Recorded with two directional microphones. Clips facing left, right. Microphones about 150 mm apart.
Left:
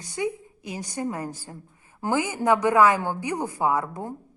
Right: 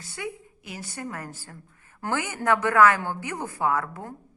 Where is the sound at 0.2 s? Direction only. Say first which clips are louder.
Left 7 dB; 20° left (ahead or behind).